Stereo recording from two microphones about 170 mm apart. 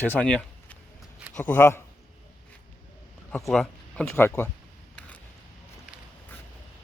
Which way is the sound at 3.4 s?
Centre (ahead or behind).